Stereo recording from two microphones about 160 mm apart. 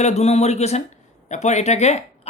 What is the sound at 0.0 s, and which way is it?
Speech, 45° left (ahead or behind).